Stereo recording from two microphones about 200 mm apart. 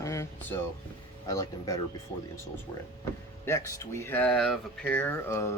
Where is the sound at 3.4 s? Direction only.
15° left (ahead or behind).